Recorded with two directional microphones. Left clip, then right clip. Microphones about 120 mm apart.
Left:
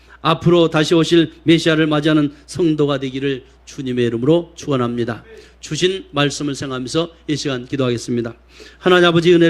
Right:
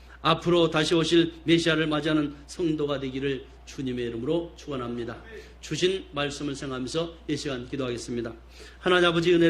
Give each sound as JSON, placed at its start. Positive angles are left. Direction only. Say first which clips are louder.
{"t": 0.4, "sound": "a man's voice", "louder": "left 11 dB", "side_deg": 25}